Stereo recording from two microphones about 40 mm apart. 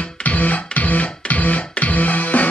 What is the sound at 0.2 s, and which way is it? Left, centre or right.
Music, left.